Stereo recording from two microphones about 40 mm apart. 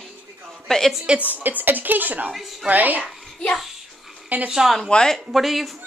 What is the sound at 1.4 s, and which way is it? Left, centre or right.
A woman's voice, right.